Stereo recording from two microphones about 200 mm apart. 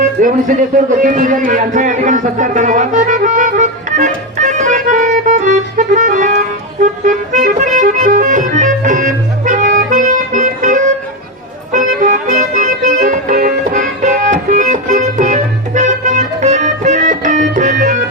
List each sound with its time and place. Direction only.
0.2 s speech: 40° right (ahead or behind)
6.8 s accordion: 40° right (ahead or behind)
11.7 s music: 40° right (ahead or behind)